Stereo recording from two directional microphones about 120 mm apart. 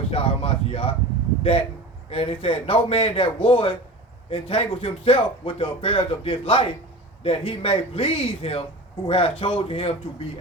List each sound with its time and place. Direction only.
0.1 s speech: 50° left (ahead or behind)